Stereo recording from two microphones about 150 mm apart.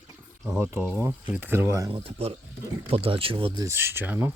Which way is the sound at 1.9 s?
40° right (ahead or behind).